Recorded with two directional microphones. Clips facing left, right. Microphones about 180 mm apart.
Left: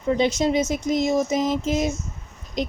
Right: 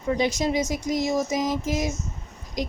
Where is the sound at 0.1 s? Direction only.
25° left (ahead or behind).